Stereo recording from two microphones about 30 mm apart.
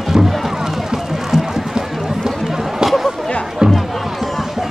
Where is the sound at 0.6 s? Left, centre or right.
Centre.